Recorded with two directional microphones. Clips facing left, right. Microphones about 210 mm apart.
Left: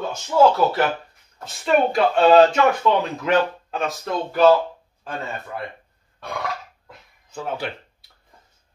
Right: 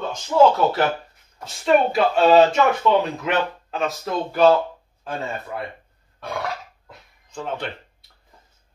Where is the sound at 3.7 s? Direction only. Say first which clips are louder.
Right 2 dB; centre (ahead or behind).